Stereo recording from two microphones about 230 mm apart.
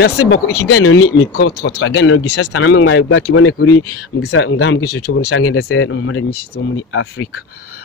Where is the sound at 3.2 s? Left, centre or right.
Left.